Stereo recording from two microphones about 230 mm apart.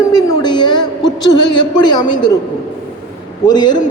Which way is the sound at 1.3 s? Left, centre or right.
Centre.